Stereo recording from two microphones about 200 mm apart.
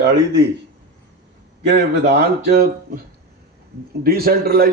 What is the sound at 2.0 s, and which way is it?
Speech, 55° right (ahead or behind).